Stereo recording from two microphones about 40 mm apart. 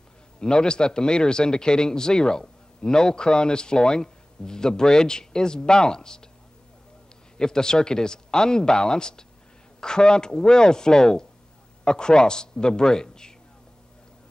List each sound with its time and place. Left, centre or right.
0.4 s a man's voice: left
7.3 s a man's voice: centre